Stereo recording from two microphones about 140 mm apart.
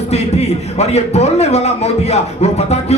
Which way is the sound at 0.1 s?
50° left (ahead or behind).